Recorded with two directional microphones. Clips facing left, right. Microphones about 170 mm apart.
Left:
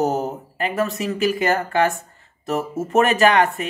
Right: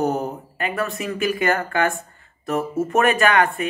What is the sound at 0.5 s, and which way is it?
Speech, 35° left (ahead or behind).